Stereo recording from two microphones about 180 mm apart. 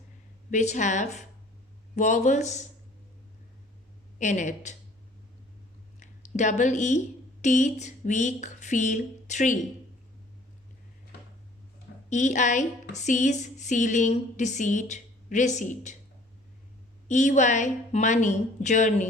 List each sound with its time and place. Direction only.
0.5 s speech: 40° left (ahead or behind)
4.2 s speech: 45° left (ahead or behind)
6.0 s speech: 40° left (ahead or behind)
12.0 s a woman's voice: 40° left (ahead or behind)
17.1 s a woman's voice: 45° left (ahead or behind)